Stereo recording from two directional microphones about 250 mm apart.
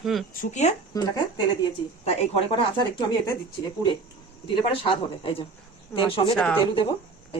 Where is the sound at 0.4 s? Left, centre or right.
Left.